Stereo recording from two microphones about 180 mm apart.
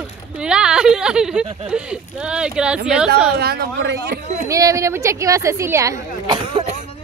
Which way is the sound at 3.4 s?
60° right (ahead or behind).